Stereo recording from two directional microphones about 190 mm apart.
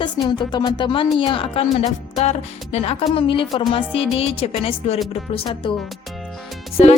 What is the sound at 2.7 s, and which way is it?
A woman's voice, 35° left (ahead or behind).